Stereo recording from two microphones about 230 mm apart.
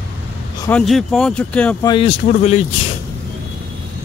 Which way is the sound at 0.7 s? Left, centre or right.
Centre.